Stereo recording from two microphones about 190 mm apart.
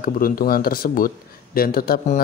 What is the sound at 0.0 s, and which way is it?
Speech, 50° left (ahead or behind).